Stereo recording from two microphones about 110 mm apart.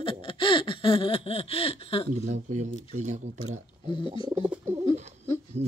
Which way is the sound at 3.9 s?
50° left (ahead or behind).